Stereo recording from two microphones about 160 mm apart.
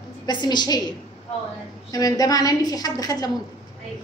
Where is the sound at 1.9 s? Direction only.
25° left (ahead or behind).